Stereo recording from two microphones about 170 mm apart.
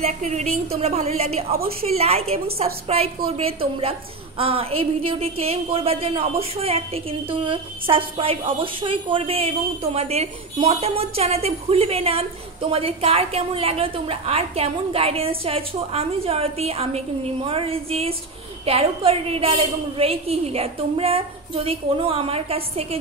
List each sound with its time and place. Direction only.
0.2 s a woman's voice: 40° right (ahead or behind)